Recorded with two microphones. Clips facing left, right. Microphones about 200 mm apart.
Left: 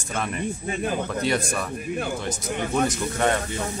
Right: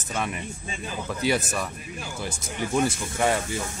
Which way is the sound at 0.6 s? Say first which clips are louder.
Left 8 dB; 60° left (ahead or behind).